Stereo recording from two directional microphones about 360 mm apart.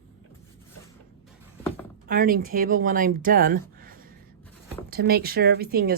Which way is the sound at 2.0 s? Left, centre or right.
Right.